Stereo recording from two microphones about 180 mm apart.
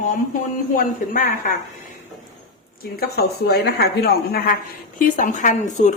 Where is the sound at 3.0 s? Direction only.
60° left (ahead or behind).